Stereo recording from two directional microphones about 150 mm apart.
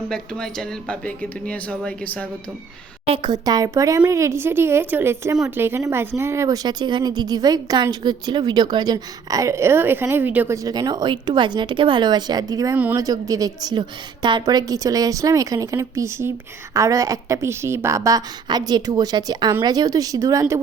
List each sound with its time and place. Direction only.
0.1 s speech: 5° left (ahead or behind)
3.1 s a woman's voice: 30° right (ahead or behind)
12.7 s a woman's voice: 10° right (ahead or behind)
13.0 s speech: 25° right (ahead or behind)